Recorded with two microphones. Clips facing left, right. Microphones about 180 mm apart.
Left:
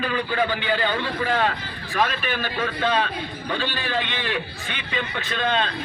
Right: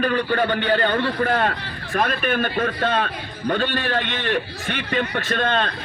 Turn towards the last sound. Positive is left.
turn(degrees=-55)  # may be behind; listen again after turning